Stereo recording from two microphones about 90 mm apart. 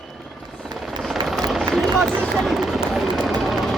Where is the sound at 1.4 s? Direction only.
Centre (ahead or behind).